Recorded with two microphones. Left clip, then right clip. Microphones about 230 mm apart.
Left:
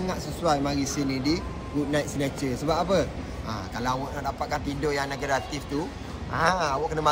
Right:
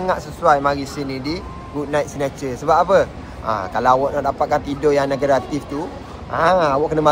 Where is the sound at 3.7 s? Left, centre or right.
Centre.